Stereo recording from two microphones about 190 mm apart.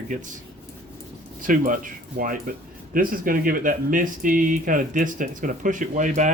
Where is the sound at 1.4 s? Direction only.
45° right (ahead or behind).